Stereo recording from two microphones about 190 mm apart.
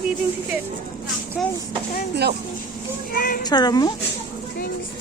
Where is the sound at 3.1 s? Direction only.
50° left (ahead or behind).